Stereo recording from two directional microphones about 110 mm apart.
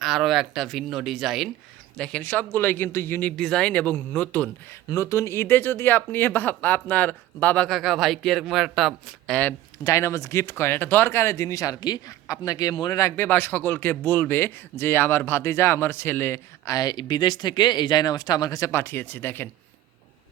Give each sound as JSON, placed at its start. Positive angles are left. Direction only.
{"t": 0.0, "sound": "a man's voice", "side_deg": 0}
{"t": 2.0, "sound": "speech", "side_deg": 15}
{"t": 4.9, "sound": "speech", "side_deg": 30}
{"t": 7.8, "sound": "a man's voice", "side_deg": 0}
{"t": 9.3, "sound": "speech", "side_deg": 15}
{"t": 9.8, "sound": "speech", "side_deg": 25}
{"t": 12.7, "sound": "speech", "side_deg": 40}
{"t": 13.0, "sound": "speech", "side_deg": 25}
{"t": 18.7, "sound": "speech", "side_deg": 20}